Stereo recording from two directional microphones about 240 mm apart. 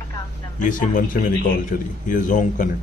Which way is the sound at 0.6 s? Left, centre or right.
Left.